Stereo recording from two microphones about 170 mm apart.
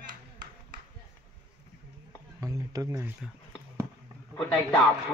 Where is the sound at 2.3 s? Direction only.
20° right (ahead or behind).